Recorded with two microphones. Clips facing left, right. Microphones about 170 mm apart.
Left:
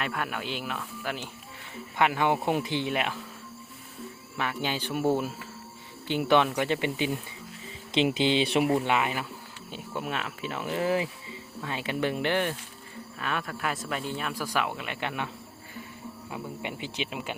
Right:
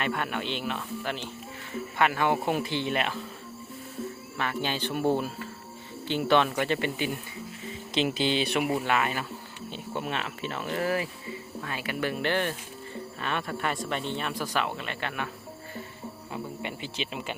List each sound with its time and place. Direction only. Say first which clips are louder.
0.0 s speech: right 2 dB; centre (ahead or behind)
4.4 s speech: even; 15° left (ahead or behind)
9.7 s speech: even; 5° left (ahead or behind)
13.1 s speech: even; centre (ahead or behind); by 15.3 s 20° left (ahead or behind)
16.6 s speech: left 1 dB; 15° left (ahead or behind)